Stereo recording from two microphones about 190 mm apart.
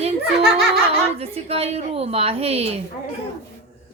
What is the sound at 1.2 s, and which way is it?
A woman's voice, 30° right (ahead or behind).